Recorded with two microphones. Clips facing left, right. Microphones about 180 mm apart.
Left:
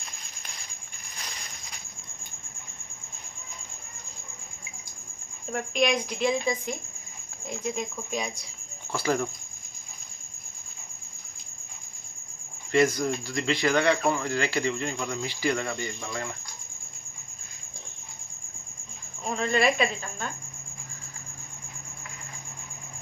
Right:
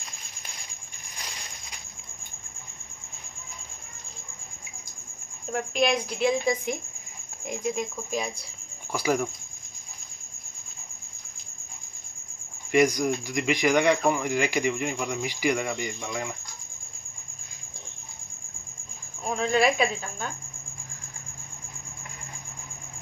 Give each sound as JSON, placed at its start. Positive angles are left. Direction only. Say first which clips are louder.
{"t": 5.5, "sound": "speech", "louder": "right 1 dB", "side_deg": -5}
{"t": 12.7, "sound": "speech", "louder": "right 1 dB", "side_deg": -15}
{"t": 19.2, "sound": "speech", "louder": "right 1 dB", "side_deg": -5}